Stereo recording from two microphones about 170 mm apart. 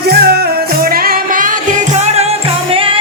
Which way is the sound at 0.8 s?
60° right (ahead or behind).